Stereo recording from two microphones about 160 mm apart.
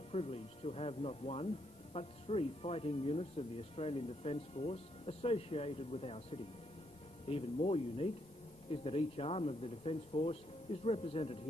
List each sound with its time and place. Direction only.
0.1 s speech: 40° left (ahead or behind)